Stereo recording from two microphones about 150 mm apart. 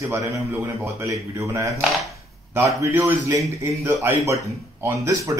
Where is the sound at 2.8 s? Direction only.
20° right (ahead or behind).